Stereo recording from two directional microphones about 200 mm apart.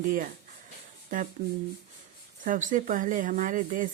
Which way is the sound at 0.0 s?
40° right (ahead or behind).